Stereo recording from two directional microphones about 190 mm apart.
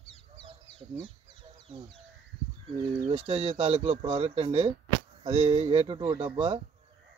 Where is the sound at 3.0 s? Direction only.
35° right (ahead or behind).